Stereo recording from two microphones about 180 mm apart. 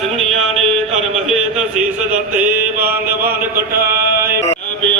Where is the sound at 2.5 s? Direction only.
10° right (ahead or behind).